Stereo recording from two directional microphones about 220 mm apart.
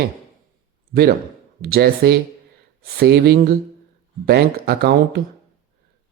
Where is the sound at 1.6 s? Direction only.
45° right (ahead or behind).